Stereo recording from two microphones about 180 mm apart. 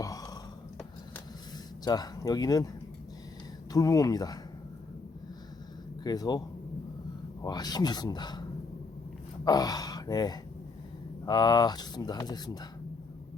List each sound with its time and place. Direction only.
0.0 s a sound: 20° left (ahead or behind)
1.8 s speech: 20° left (ahead or behind)
3.7 s speech: 20° left (ahead or behind)
6.0 s speech: 20° left (ahead or behind)
7.4 s speech: 20° left (ahead or behind)